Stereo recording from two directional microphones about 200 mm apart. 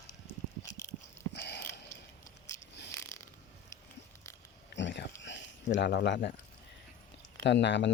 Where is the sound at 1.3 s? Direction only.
55° left (ahead or behind).